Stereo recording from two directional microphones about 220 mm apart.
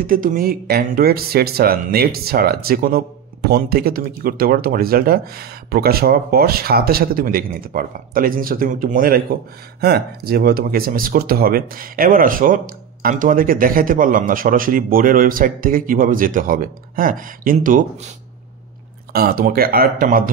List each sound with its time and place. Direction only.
0.0 s speech: 40° right (ahead or behind)
19.1 s speech: 40° right (ahead or behind)